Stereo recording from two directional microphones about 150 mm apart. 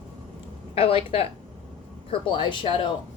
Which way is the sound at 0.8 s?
40° left (ahead or behind).